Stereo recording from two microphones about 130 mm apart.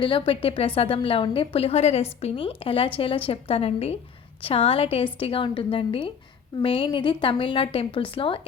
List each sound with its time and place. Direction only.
0.0 s a woman's voice: 40° left (ahead or behind)